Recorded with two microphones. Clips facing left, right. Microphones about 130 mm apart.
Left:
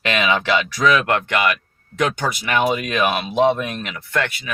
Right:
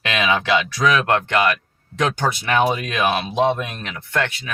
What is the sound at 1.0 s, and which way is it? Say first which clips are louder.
Speech: right 1 dB; 30° right (ahead or behind).